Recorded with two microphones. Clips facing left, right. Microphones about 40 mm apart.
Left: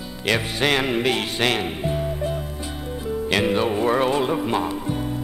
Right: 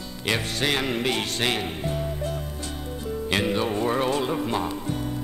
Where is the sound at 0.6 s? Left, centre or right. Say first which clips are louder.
Left 4 dB; left.